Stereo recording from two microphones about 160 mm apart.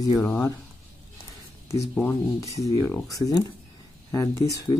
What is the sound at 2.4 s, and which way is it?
Speech, 20° left (ahead or behind).